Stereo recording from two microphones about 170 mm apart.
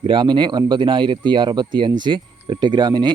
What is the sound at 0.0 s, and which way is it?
Speech, 25° right (ahead or behind).